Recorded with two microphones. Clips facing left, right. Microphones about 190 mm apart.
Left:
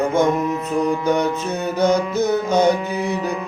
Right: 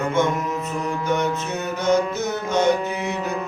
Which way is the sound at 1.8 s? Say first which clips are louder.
Left 3 dB; 35° left (ahead or behind).